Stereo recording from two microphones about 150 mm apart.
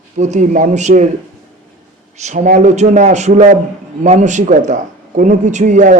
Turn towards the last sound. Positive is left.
turn(degrees=-55)  # may be behind; listen again after turning